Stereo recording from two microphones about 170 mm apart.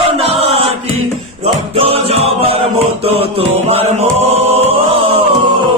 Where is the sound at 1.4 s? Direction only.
35° right (ahead or behind).